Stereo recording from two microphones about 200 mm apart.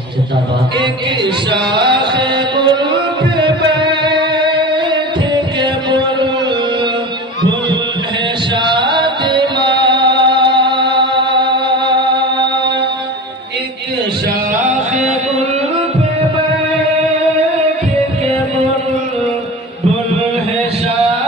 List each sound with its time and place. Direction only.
1.5 s music: 25° right (ahead or behind)
8.6 s music: 25° right (ahead or behind)